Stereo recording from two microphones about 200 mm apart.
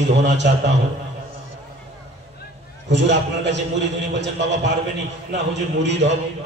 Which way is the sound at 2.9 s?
60° right (ahead or behind).